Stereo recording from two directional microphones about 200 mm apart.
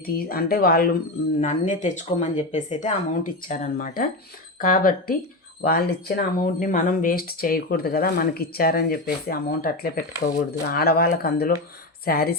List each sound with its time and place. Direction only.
0.0 s speech: 45° left (ahead or behind)
1.4 s speech: 40° left (ahead or behind)